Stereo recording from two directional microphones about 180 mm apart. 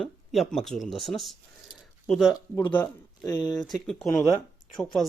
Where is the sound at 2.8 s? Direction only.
20° left (ahead or behind).